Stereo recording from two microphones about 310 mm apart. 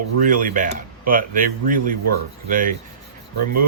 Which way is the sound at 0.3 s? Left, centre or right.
Right.